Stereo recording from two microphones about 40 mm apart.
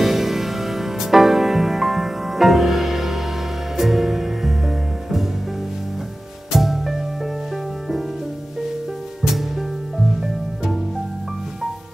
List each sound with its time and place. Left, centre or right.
0.0 s music: centre
6.5 s music: centre
9.2 s music: centre